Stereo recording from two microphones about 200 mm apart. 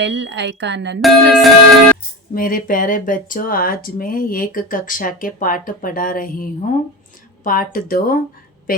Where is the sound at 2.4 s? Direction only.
45° left (ahead or behind).